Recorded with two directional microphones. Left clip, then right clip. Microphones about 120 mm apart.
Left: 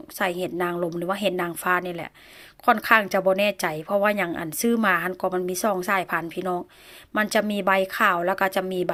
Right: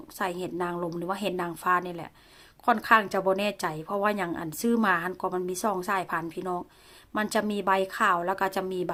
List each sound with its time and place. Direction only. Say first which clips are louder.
0.2 s a woman's voice: left 5 dB; 20° left (ahead or behind)